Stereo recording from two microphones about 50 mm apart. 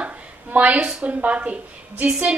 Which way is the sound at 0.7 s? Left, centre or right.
Right.